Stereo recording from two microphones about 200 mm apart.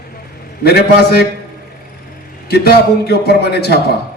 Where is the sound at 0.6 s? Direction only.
55° left (ahead or behind).